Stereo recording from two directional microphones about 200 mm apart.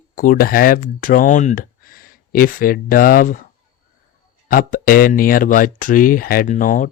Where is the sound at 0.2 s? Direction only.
45° left (ahead or behind).